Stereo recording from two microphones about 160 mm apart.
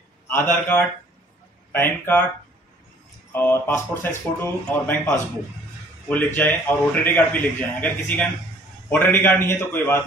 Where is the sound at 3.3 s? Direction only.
15° left (ahead or behind).